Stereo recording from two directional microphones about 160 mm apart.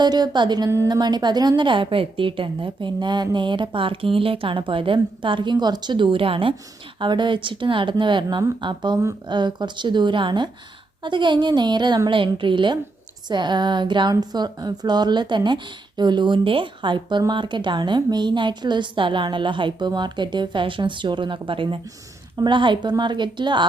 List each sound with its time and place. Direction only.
0.0 s a woman's voice: 25° right (ahead or behind)